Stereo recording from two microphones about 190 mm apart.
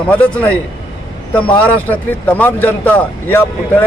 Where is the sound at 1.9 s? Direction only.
10° left (ahead or behind).